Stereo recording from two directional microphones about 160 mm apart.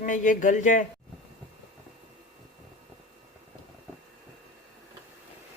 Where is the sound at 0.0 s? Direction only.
55° left (ahead or behind).